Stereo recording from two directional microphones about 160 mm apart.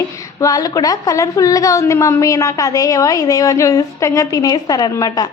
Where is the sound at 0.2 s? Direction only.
20° left (ahead or behind).